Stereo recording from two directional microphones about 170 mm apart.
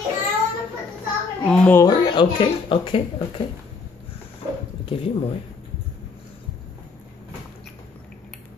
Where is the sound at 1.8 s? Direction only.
25° left (ahead or behind).